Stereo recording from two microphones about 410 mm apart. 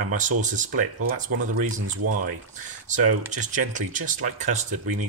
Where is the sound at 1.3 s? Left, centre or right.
Right.